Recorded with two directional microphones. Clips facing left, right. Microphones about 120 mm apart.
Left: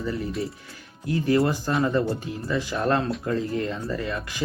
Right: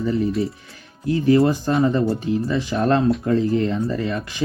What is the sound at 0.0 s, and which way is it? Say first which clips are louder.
Speech: right 7 dB; 20° right (ahead or behind).